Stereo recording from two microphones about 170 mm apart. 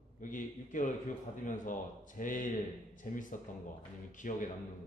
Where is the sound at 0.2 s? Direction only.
50° left (ahead or behind).